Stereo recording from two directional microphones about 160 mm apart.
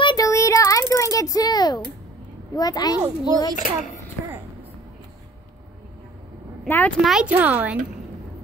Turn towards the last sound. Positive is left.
turn(degrees=-10)  # may be behind; listen again after turning